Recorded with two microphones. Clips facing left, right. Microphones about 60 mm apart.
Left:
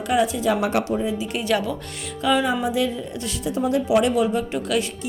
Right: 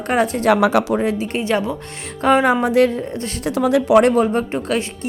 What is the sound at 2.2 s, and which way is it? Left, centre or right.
Speech, right.